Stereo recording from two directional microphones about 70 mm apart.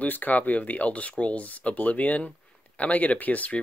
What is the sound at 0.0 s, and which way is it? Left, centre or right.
Speech, left.